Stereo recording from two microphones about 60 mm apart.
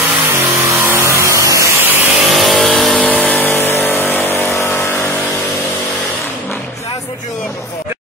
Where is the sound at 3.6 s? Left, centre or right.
Left.